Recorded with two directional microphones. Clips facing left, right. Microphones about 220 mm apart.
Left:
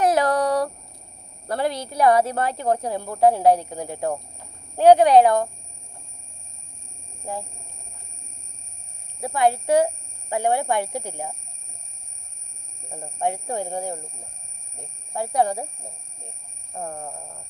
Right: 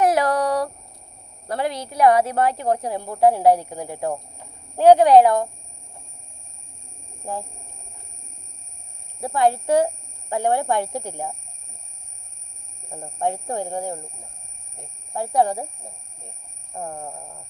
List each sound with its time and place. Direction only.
0.0 s a sound: 20° left (ahead or behind)
1.5 s speech: 30° left (ahead or behind)
9.2 s a woman's voice: 15° left (ahead or behind)
13.1 s a woman's voice: 15° left (ahead or behind)
15.1 s a woman's voice: 15° left (ahead or behind)